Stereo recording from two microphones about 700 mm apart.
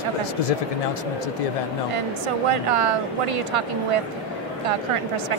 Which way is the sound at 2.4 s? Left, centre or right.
Right.